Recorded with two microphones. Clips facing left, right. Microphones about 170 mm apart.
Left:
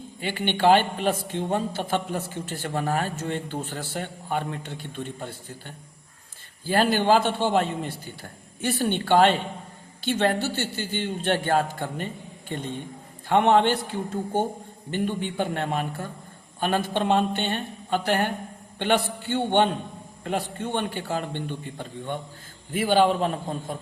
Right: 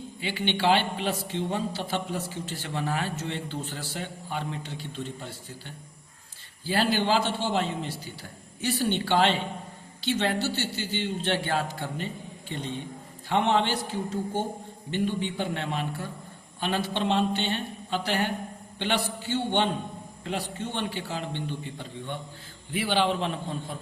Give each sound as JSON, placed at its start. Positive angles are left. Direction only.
{"t": 0.2, "sound": "a man's voice", "side_deg": 50}